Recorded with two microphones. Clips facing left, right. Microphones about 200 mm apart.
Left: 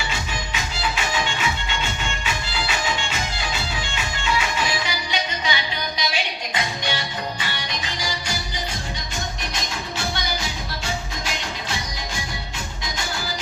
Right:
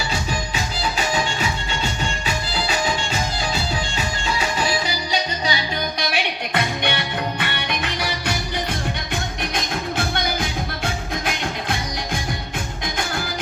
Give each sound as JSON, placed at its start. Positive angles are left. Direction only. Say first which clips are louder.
{"t": 0.1, "sound": "music", "louder": "right 4 dB", "side_deg": -40}
{"t": 3.9, "sound": "music", "louder": "even", "side_deg": -35}
{"t": 6.0, "sound": "music", "louder": "right 3 dB", "side_deg": -60}